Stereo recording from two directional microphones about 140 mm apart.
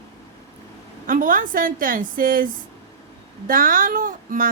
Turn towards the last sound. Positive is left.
turn(degrees=-70)  # may be behind; listen again after turning